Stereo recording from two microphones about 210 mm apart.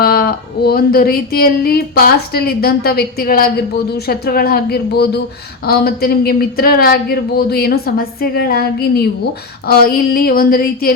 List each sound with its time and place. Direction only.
0.0 s speech: 45° left (ahead or behind)